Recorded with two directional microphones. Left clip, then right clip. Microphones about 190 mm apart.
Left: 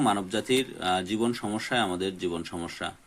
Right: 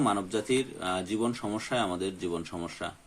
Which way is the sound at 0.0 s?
20° left (ahead or behind).